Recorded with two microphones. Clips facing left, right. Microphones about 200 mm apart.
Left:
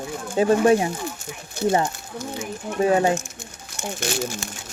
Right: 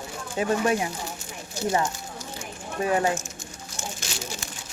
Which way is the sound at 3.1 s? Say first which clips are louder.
Left 3 dB; 60° left (ahead or behind).